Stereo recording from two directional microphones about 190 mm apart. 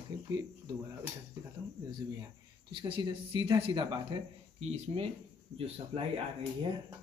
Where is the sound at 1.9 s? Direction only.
20° right (ahead or behind).